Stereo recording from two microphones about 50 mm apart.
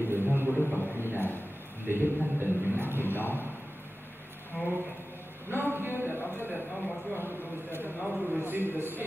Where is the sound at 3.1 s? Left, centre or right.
Left.